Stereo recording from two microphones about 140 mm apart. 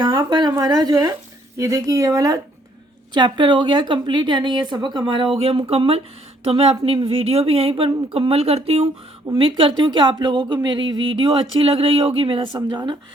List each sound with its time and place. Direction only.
0.0 s speech: 30° right (ahead or behind)